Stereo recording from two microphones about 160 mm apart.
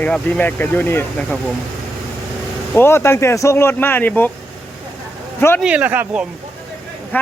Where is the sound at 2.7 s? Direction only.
15° left (ahead or behind).